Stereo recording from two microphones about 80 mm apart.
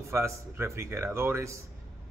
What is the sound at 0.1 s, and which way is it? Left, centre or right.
Speech, right.